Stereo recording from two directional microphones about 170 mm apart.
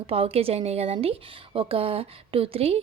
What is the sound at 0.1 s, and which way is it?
A woman's voice, 35° right (ahead or behind).